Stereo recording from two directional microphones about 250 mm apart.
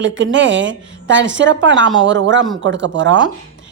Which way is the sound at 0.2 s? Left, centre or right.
Right.